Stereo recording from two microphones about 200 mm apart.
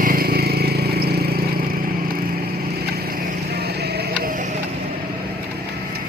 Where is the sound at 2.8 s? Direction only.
50° right (ahead or behind).